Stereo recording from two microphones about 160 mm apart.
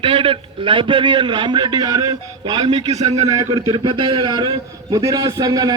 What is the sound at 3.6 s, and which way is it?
A man's voice, 30° right (ahead or behind).